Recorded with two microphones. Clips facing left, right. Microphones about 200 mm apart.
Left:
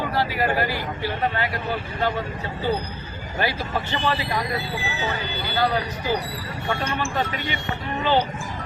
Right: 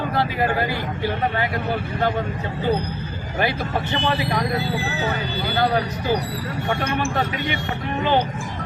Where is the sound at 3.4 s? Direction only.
20° right (ahead or behind).